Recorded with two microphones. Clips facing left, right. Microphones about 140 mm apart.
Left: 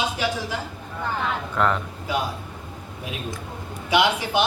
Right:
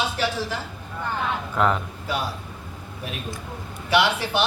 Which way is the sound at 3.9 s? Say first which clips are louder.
Left 1 dB; 15° left (ahead or behind).